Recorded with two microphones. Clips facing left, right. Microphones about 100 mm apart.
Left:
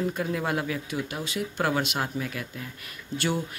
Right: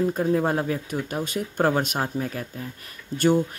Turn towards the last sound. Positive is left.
turn(degrees=-45)  # may be behind; listen again after turning